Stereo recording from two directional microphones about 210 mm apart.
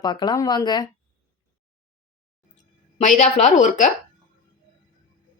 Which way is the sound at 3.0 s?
35° left (ahead or behind).